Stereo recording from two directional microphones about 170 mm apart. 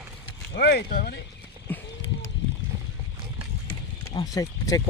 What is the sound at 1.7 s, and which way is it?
Horse, 10° left (ahead or behind).